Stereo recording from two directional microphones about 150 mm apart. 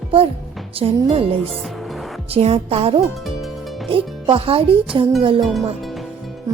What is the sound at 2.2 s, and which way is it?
A woman's voice, 40° right (ahead or behind).